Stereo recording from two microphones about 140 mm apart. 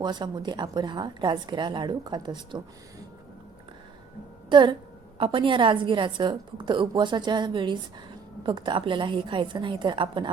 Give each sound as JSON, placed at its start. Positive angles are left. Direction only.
{"t": 0.0, "sound": "a woman's voice", "side_deg": -30}
{"t": 4.4, "sound": "a woman's voice", "side_deg": -35}